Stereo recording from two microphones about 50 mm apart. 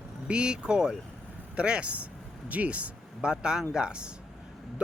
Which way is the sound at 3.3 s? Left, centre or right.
Centre.